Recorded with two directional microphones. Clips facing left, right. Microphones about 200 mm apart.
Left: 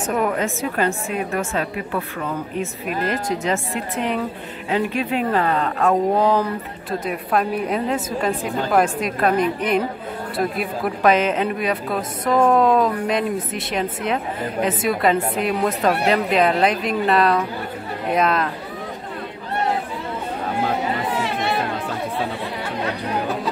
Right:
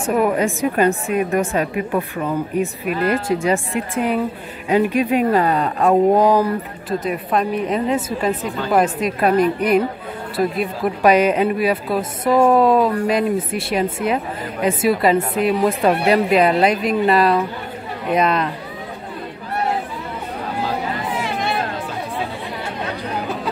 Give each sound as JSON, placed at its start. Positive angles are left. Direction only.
{"t": 0.0, "sound": "speech", "side_deg": -10}
{"t": 7.1, "sound": "a woman's voice", "side_deg": 0}
{"t": 11.0, "sound": "a woman's voice", "side_deg": -10}